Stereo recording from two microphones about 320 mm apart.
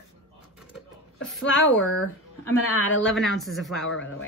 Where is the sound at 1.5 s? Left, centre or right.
Left.